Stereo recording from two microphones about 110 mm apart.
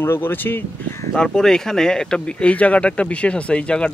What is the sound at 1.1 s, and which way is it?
Speech, 5° left (ahead or behind).